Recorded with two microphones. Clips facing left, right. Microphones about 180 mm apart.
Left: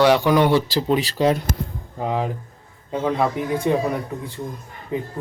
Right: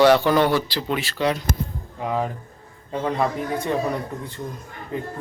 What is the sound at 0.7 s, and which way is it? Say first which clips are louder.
Speech: left 6 dB; 35° left (ahead or behind).